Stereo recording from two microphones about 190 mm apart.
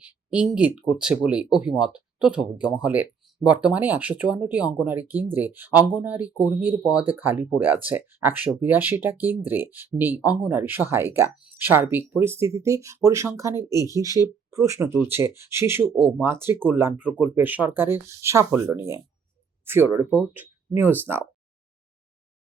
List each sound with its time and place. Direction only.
0.0 s speech: 5° right (ahead or behind)